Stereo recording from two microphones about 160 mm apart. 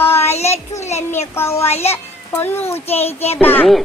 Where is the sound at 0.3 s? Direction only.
40° left (ahead or behind).